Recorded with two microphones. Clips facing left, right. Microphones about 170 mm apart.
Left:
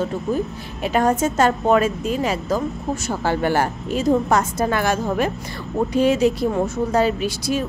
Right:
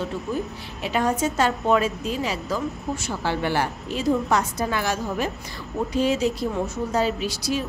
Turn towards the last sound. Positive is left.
turn(degrees=50)  # may be behind; listen again after turning